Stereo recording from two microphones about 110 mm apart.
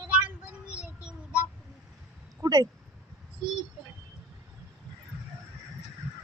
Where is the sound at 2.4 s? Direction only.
30° right (ahead or behind).